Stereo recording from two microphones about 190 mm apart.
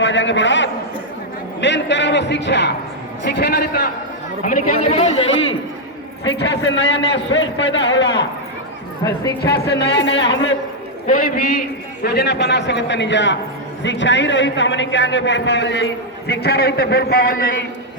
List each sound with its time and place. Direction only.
0.0 s a man's voice: 70° left (ahead or behind)
4.4 s speech: 45° left (ahead or behind)
6.2 s a man's voice: 70° left (ahead or behind)
9.4 s a man's voice: 60° left (ahead or behind)
11.0 s a man's voice: 45° left (ahead or behind)